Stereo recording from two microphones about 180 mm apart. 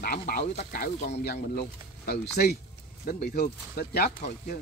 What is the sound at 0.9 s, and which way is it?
Speech, 40° left (ahead or behind).